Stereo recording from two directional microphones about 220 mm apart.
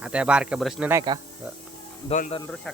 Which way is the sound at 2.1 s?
25° left (ahead or behind).